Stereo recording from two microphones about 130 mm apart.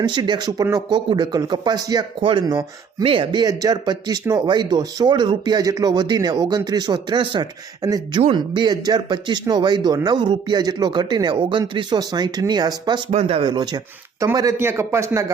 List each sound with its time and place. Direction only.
0.0 s speech: 35° right (ahead or behind)
3.0 s speech: 40° right (ahead or behind)
8.2 s speech: 40° right (ahead or behind)
13.1 s speech: 55° right (ahead or behind)
13.4 s a man's voice: 35° right (ahead or behind)